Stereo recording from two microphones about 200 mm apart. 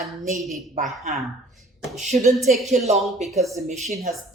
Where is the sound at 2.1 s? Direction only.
35° right (ahead or behind).